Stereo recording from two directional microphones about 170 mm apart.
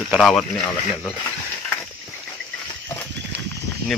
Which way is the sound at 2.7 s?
20° left (ahead or behind).